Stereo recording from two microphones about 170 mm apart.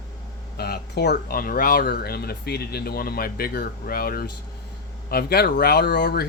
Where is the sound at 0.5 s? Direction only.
70° left (ahead or behind).